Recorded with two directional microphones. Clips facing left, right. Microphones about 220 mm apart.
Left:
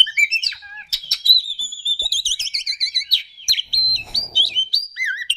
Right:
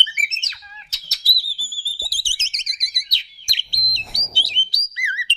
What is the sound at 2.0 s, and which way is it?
Alarm, 25° right (ahead or behind).